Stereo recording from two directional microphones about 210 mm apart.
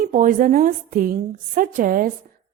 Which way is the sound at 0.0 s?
40° right (ahead or behind).